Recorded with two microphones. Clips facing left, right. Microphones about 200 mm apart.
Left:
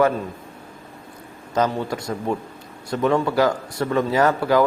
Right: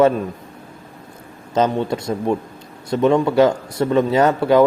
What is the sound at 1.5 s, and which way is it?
Speech, 25° right (ahead or behind).